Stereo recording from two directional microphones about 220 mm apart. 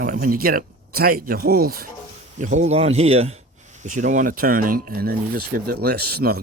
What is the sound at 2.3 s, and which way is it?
Speech, 35° right (ahead or behind).